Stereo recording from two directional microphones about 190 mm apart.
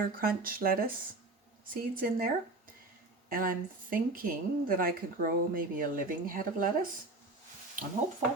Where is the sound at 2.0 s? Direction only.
50° right (ahead or behind).